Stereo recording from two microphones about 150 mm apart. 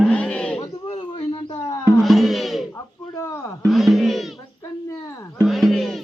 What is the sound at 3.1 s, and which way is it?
Speech, 20° left (ahead or behind).